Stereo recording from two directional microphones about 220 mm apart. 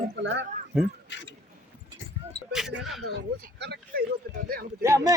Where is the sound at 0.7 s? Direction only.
5° right (ahead or behind).